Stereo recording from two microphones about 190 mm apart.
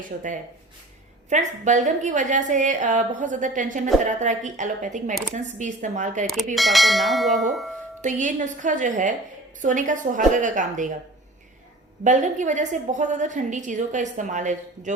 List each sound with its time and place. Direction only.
0.0 s a woman's voice: 45° right (ahead or behind)
6.2 s bell: centre (ahead or behind)
8.0 s a woman's voice: 40° right (ahead or behind)
12.0 s a woman's voice: 40° right (ahead or behind)